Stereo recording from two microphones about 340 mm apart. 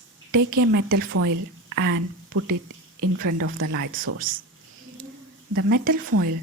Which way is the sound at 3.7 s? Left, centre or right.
Right.